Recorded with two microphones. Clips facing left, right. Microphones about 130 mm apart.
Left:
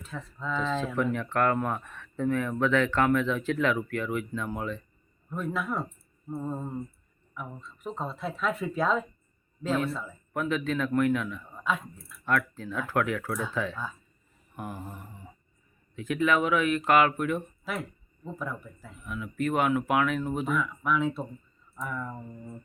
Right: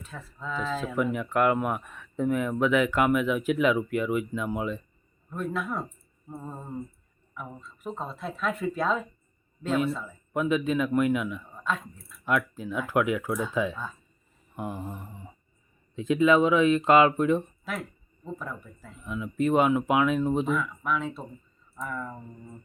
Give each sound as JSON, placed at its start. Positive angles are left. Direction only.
{"t": 0.0, "sound": "speech", "side_deg": -5}
{"t": 5.3, "sound": "speech", "side_deg": 0}
{"t": 10.3, "sound": "speech", "side_deg": -15}
{"t": 11.6, "sound": "speech", "side_deg": 5}
{"t": 12.2, "sound": "speech", "side_deg": -15}
{"t": 14.5, "sound": "a sound", "side_deg": -20}
{"t": 16.0, "sound": "speech", "side_deg": -20}
{"t": 17.7, "sound": "speech", "side_deg": 0}
{"t": 19.0, "sound": "speech", "side_deg": -20}
{"t": 20.6, "sound": "speech", "side_deg": 0}